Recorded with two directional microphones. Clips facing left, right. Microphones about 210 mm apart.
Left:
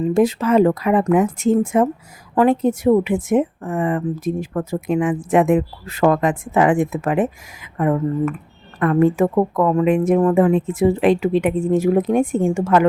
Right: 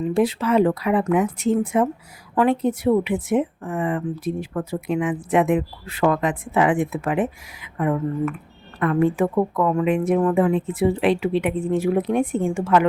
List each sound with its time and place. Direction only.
0.0 s a woman's voice: 45° left (ahead or behind)